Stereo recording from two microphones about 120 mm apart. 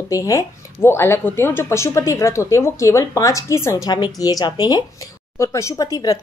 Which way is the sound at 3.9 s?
35° left (ahead or behind).